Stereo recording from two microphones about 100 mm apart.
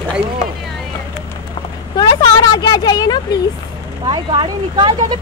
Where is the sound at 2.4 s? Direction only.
45° left (ahead or behind).